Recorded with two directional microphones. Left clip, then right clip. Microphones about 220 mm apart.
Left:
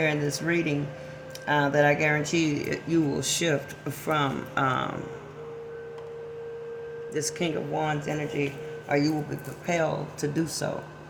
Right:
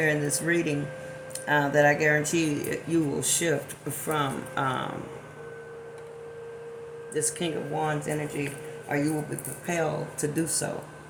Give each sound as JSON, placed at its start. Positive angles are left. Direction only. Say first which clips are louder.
{"t": 0.0, "sound": "speech", "louder": "right 1 dB", "side_deg": 25}
{"t": 7.1, "sound": "speech", "louder": "even", "side_deg": 30}
{"t": 9.6, "sound": "speech", "louder": "left 2 dB", "side_deg": 20}